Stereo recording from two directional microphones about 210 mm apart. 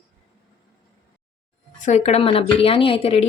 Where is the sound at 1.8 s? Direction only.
35° left (ahead or behind).